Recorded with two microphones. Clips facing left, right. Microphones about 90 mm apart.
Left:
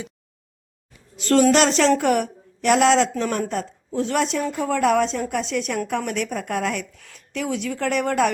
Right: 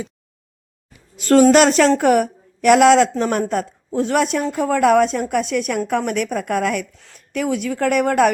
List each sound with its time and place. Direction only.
1.1 s a woman's voice: 50° right (ahead or behind)